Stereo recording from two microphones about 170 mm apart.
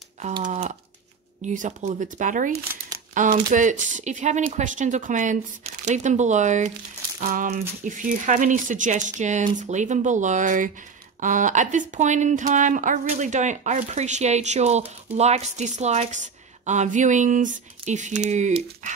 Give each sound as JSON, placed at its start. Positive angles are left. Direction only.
{"t": 0.4, "sound": "a woman's voice", "side_deg": -45}